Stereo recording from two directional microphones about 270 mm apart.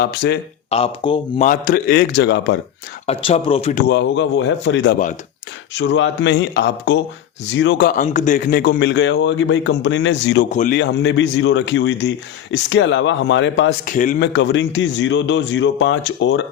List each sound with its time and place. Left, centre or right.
0.0 s a man's voice: left
0.7 s speech: centre
1.5 s a man's voice: left
3.1 s speech: left
3.8 s a man's voice: left
10.5 s speech: left
10.8 s speech: left
13.8 s speech: left
14.3 s speech: left